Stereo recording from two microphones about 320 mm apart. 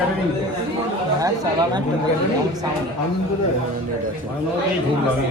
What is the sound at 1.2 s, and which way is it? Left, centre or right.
Speech, centre.